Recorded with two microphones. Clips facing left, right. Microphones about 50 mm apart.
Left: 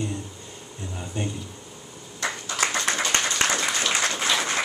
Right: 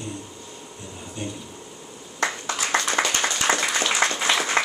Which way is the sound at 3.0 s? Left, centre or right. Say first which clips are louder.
Right 4 dB; right.